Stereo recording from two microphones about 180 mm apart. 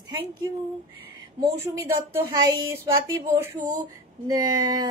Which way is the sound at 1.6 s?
10° right (ahead or behind).